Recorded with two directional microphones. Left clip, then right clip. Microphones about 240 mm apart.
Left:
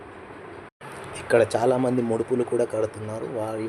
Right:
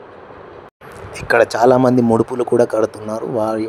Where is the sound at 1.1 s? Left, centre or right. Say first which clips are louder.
Right 6 dB; right.